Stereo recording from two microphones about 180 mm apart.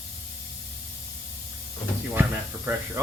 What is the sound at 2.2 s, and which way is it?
Speech, 10° right (ahead or behind).